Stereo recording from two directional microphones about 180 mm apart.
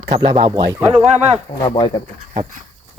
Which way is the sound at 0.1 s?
35° right (ahead or behind).